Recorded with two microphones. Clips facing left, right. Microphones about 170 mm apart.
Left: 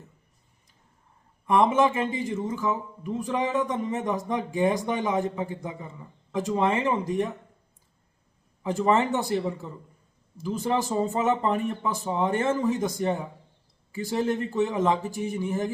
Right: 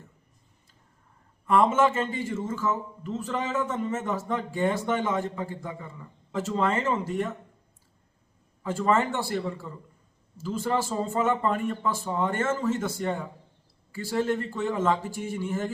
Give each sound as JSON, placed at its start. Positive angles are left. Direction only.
{"t": 1.5, "sound": "speech", "side_deg": 15}
{"t": 8.6, "sound": "a man's voice", "side_deg": 20}